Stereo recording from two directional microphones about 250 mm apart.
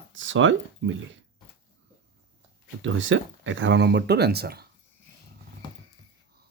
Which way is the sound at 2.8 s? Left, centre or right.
Right.